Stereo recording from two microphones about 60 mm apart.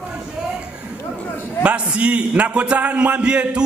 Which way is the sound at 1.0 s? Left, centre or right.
Left.